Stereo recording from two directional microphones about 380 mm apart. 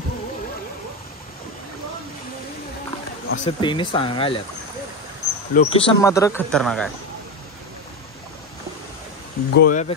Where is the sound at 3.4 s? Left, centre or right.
Centre.